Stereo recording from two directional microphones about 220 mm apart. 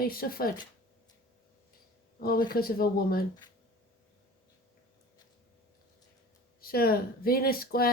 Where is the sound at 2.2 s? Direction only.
40° left (ahead or behind).